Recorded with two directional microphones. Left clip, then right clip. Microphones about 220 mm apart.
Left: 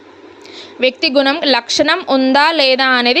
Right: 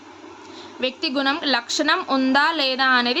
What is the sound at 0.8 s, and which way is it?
A woman's voice, 30° left (ahead or behind).